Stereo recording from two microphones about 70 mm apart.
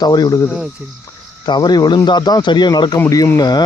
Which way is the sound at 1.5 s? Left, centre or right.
Left.